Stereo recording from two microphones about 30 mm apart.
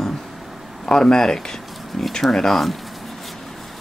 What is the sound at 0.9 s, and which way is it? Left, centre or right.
Speech, left.